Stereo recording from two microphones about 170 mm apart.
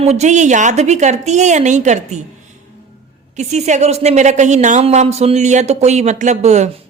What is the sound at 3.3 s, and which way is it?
A woman's voice, 45° right (ahead or behind).